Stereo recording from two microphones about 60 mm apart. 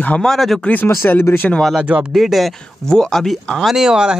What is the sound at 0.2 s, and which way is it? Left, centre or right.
Speech, centre.